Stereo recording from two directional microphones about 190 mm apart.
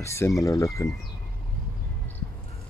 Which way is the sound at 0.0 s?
15° left (ahead or behind).